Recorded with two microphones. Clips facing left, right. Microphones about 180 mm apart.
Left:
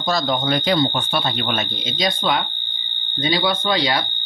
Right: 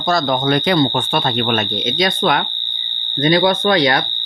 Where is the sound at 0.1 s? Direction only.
60° right (ahead or behind).